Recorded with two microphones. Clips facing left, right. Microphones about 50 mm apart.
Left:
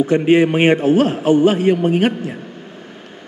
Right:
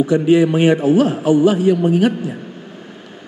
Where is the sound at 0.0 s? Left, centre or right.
Left.